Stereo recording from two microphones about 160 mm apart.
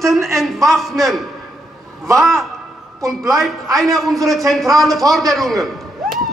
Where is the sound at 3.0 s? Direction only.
20° right (ahead or behind).